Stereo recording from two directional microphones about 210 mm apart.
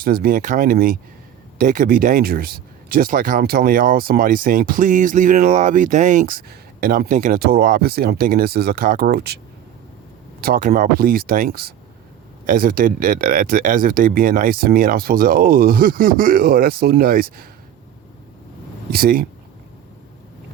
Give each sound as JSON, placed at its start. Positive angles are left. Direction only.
{"t": 0.0, "sound": "speech", "side_deg": -45}
{"t": 10.4, "sound": "speech", "side_deg": -45}
{"t": 18.9, "sound": "speech", "side_deg": -45}